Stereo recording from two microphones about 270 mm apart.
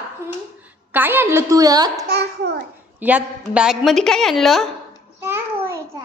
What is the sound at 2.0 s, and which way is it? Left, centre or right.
Speech, right.